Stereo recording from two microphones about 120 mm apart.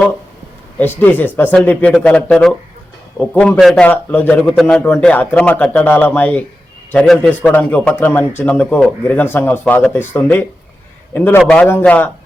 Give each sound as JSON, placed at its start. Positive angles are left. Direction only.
{"t": 0.8, "sound": "speech", "side_deg": 15}
{"t": 3.6, "sound": "a man's voice", "side_deg": 0}
{"t": 3.8, "sound": "speech", "side_deg": 15}